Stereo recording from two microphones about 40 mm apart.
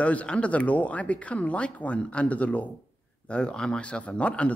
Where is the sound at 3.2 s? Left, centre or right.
Left.